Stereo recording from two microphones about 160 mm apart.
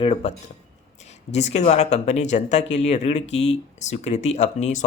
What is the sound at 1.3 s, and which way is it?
Speech, 45° left (ahead or behind).